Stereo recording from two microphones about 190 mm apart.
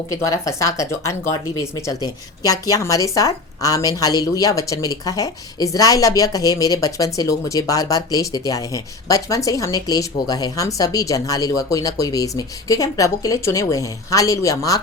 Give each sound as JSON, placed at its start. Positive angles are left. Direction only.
{"t": 0.1, "sound": "speech", "side_deg": 15}